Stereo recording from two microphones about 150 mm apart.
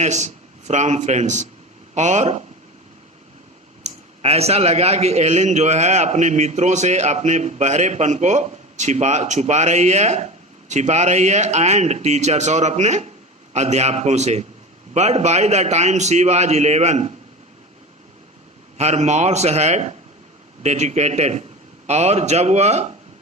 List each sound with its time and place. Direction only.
0.0 s speech: 50° right (ahead or behind)
3.8 s speech: 45° right (ahead or behind)
18.8 s speech: 50° right (ahead or behind)